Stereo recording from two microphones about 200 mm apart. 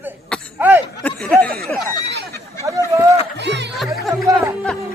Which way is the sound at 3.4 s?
60° right (ahead or behind).